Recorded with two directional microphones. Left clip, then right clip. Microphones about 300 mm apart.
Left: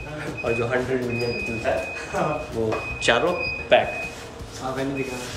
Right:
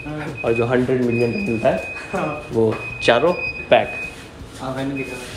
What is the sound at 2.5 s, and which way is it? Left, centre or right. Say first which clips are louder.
Speech: right 6 dB; centre.